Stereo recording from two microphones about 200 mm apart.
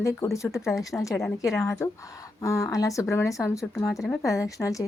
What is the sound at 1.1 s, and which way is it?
Speech, centre (ahead or behind).